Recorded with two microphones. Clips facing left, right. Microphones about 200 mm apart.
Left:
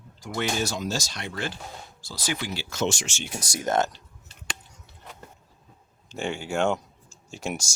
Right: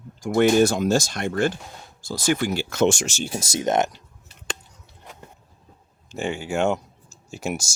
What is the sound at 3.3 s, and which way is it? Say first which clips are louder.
Speech: right 3 dB; 25° right (ahead or behind).